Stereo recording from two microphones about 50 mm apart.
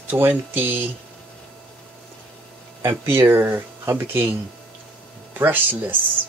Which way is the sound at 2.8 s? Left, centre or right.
Right.